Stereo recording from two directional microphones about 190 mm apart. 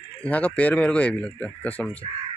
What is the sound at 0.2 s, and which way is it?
Speech, 5° left (ahead or behind).